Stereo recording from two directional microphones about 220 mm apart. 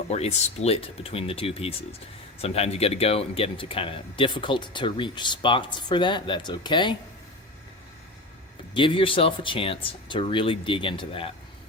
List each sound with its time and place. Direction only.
0.1 s speech: 30° left (ahead or behind)
8.7 s speech: 25° left (ahead or behind)